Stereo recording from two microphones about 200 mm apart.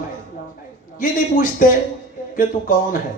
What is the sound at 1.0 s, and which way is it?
Speech, 40° left (ahead or behind).